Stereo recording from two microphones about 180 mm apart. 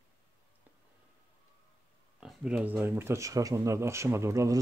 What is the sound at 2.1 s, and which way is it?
Speech, 5° right (ahead or behind).